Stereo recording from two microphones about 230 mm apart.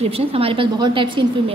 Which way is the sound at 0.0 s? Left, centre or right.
Right.